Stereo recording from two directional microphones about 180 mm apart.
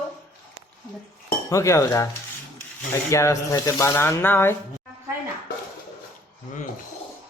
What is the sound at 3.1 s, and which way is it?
Speech, 15° left (ahead or behind).